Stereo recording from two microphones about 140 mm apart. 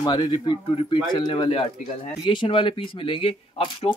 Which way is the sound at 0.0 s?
35° left (ahead or behind).